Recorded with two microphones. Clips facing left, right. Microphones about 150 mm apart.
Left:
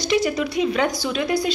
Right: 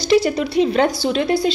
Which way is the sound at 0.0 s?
30° right (ahead or behind).